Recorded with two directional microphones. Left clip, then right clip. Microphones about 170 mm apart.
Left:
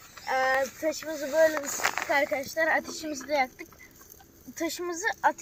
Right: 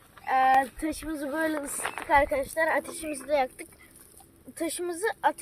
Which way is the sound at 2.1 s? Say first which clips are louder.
Right 8 dB; 60° right (ahead or behind).